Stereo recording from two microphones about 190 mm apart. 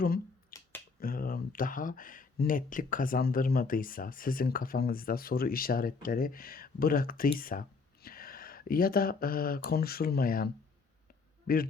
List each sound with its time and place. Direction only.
0.5 s finger snapping: 15° left (ahead or behind)
0.9 s speech: 50° left (ahead or behind)